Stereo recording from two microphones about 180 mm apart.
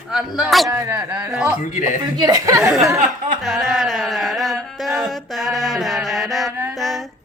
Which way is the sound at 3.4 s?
Centre (ahead or behind).